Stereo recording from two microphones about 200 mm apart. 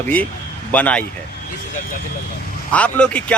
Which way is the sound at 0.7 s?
5° left (ahead or behind).